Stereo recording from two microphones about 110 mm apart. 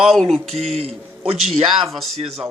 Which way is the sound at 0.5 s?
65° right (ahead or behind).